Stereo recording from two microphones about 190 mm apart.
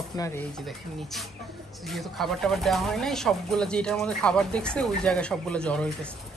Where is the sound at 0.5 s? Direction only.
Centre (ahead or behind).